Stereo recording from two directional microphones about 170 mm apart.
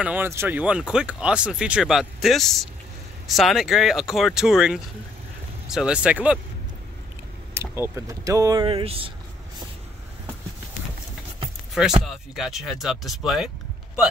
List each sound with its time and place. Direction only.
0.0 s speech: 10° right (ahead or behind)
7.5 s speech: 15° right (ahead or behind)
8.6 s speech: 30° right (ahead or behind)
12.0 s speech: centre (ahead or behind)